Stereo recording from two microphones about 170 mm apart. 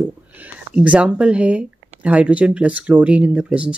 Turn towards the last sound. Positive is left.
turn(degrees=-5)  # may be behind; listen again after turning